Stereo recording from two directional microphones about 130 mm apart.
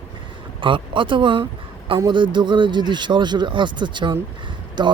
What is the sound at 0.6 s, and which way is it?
Speech, 40° right (ahead or behind).